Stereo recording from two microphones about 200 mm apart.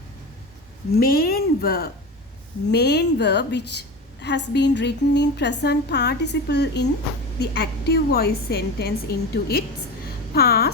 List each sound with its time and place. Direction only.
0.9 s a woman's voice: 50° left (ahead or behind)